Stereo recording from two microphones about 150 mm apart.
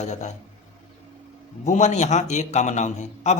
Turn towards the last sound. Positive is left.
turn(degrees=50)  # may be behind; listen again after turning